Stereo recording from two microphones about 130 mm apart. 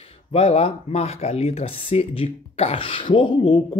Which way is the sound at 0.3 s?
55° left (ahead or behind).